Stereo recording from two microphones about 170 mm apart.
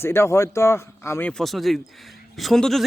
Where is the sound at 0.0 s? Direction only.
15° left (ahead or behind).